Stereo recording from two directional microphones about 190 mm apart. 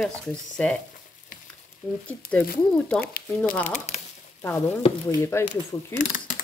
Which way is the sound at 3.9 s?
35° left (ahead or behind).